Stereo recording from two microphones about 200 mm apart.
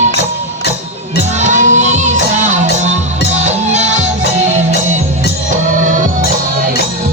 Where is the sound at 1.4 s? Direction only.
40° right (ahead or behind).